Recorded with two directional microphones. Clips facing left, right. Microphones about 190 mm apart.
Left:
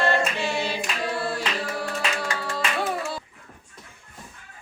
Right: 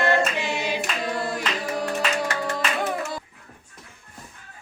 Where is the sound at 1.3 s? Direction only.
15° right (ahead or behind).